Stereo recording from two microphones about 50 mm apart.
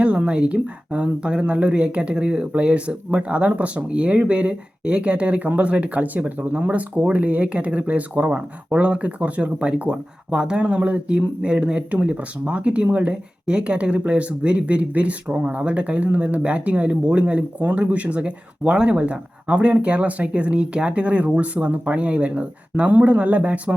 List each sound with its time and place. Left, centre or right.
0.0 s a woman's voice: right